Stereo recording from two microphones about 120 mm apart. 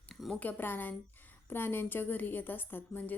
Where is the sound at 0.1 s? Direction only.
Centre (ahead or behind).